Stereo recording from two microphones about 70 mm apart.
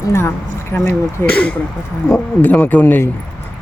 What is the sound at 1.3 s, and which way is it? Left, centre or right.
Speech, centre.